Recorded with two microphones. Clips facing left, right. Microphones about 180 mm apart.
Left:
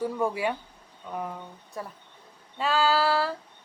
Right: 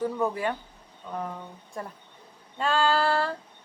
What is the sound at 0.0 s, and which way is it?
Speech, 10° left (ahead or behind).